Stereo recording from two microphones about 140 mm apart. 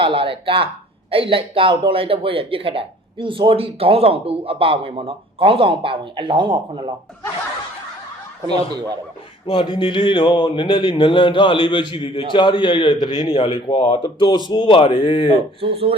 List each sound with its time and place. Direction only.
0.0 s speech: 40° right (ahead or behind)
9.5 s a man's voice: 35° left (ahead or behind)
15.6 s speech: 40° right (ahead or behind)